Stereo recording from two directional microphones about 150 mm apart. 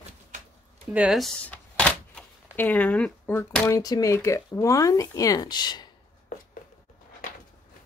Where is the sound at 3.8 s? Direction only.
25° left (ahead or behind).